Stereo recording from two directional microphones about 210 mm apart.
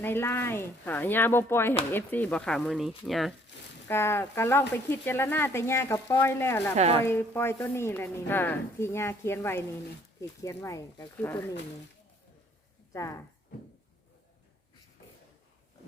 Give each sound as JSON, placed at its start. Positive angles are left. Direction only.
{"t": 0.0, "sound": "speech", "side_deg": 10}
{"t": 3.8, "sound": "speech", "side_deg": 10}
{"t": 6.7, "sound": "a woman's voice", "side_deg": -30}
{"t": 7.0, "sound": "speech", "side_deg": 10}
{"t": 12.9, "sound": "speech", "side_deg": 15}